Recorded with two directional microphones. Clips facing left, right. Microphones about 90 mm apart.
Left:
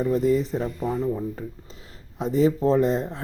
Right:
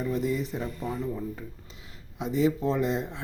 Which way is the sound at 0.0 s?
40° left (ahead or behind).